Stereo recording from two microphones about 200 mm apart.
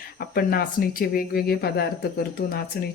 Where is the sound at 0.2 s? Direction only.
50° left (ahead or behind).